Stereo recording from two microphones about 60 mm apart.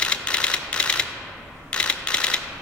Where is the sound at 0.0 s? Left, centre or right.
Centre.